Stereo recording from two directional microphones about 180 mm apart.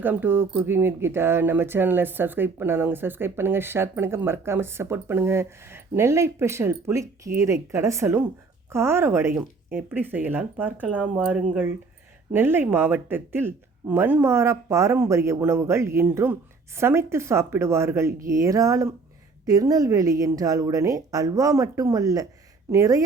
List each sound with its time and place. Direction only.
0.0 s a woman's voice: 10° right (ahead or behind)